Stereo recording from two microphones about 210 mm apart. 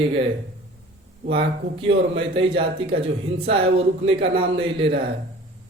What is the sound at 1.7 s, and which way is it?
A man's voice, 25° right (ahead or behind).